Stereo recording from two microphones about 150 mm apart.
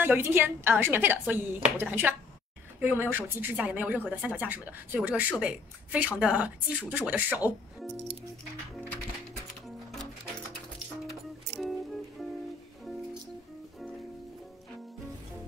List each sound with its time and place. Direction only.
0.0 s speech: 15° right (ahead or behind)
11.6 s music: centre (ahead or behind)